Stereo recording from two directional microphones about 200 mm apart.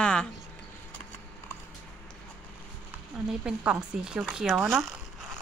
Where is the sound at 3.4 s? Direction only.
5° right (ahead or behind).